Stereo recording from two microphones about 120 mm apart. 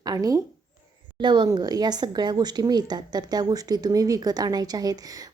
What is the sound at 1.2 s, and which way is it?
Speech, 40° right (ahead or behind).